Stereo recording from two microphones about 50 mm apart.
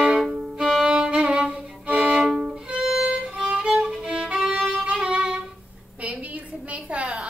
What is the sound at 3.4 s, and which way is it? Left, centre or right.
Violin, centre.